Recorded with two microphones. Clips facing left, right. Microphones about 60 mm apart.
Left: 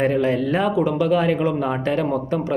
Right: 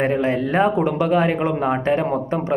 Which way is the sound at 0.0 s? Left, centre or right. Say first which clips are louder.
Even; right.